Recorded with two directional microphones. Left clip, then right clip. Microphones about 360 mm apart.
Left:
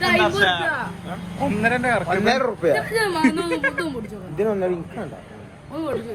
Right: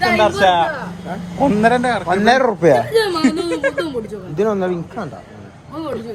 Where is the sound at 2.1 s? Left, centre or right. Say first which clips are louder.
Right 6 dB; right.